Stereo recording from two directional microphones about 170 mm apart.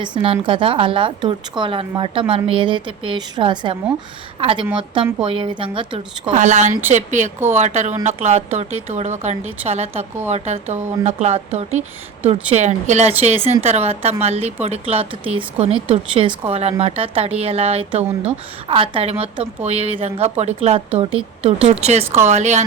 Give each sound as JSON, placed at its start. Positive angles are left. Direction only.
{"t": 0.0, "sound": "a woman's voice", "side_deg": -30}
{"t": 6.3, "sound": "a woman's voice", "side_deg": -45}